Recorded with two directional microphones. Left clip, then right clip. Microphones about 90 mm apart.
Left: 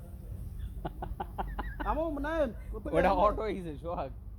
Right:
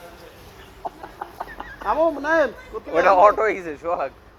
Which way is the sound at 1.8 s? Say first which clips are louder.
Right 14 dB; 25° left (ahead or behind).